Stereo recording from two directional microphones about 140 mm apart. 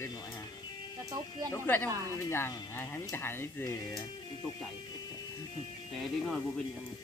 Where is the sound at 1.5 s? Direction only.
15° left (ahead or behind).